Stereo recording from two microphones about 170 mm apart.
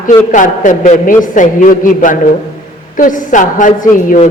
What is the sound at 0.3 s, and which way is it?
A man's voice, 50° left (ahead or behind).